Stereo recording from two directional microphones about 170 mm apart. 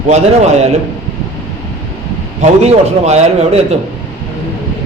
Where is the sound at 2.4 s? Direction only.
40° right (ahead or behind).